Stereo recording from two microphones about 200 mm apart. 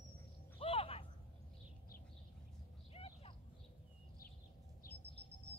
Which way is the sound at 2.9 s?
30° left (ahead or behind).